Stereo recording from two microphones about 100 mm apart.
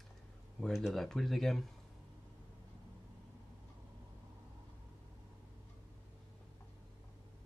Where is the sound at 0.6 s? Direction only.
Centre (ahead or behind).